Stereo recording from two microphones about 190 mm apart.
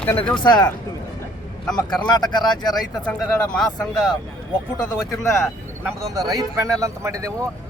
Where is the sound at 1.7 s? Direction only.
20° left (ahead or behind).